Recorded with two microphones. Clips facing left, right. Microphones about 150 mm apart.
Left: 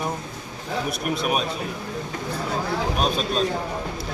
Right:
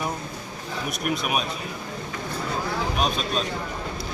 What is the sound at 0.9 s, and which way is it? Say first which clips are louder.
Speech: right 3 dB; 30° left (ahead or behind).